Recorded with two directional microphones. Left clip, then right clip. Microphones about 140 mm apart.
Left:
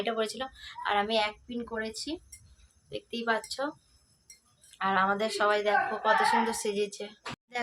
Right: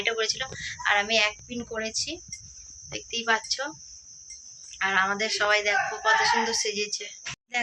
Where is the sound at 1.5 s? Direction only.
10° right (ahead or behind).